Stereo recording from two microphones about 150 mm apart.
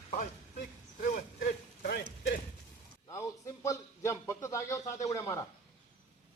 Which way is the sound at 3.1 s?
20° left (ahead or behind).